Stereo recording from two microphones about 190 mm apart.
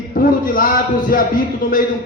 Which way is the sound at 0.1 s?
50° left (ahead or behind).